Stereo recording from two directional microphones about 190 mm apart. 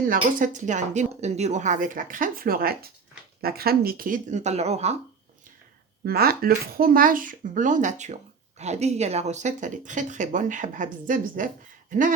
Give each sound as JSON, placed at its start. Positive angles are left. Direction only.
{"t": 0.3, "sound": "a woman's voice", "side_deg": -40}
{"t": 6.1, "sound": "speech", "side_deg": -55}